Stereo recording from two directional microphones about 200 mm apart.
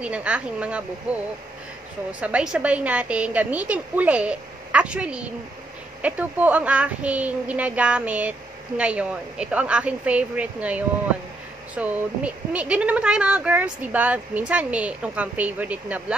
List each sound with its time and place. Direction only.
0.0 s a woman's voice: 5° right (ahead or behind)